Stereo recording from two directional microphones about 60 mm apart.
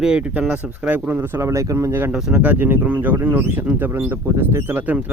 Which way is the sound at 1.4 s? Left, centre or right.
Right.